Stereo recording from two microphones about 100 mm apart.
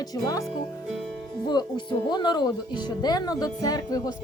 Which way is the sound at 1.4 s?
45° left (ahead or behind).